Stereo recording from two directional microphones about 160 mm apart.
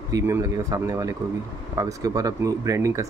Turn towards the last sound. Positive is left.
turn(degrees=-20)  # may be behind; listen again after turning